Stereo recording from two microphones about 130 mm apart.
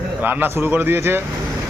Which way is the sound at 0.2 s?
15° right (ahead or behind).